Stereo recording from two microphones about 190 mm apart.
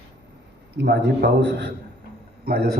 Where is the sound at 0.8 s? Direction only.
65° right (ahead or behind).